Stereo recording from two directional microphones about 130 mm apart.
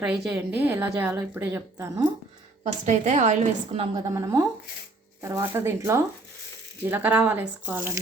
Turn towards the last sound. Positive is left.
turn(degrees=-15)  # may be behind; listen again after turning